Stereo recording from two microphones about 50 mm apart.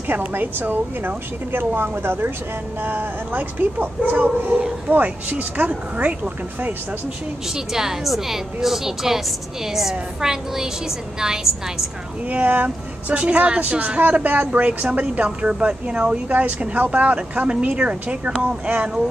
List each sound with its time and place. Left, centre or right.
0.1 s speech: right
7.5 s a woman's voice: centre
12.3 s a woman's voice: right
16.3 s a woman's voice: right